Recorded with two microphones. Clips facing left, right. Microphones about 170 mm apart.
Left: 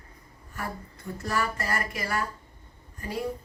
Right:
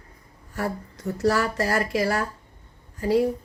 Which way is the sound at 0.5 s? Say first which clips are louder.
Right 7 dB; 90° right.